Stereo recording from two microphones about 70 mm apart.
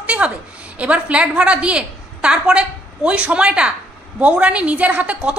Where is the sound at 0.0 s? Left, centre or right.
Centre.